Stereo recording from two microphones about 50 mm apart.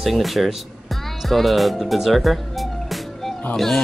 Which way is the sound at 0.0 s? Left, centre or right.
Centre.